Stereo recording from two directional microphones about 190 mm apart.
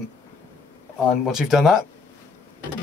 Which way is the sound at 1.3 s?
5° right (ahead or behind).